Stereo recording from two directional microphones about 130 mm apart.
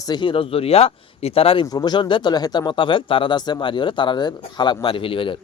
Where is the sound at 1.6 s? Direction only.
30° left (ahead or behind).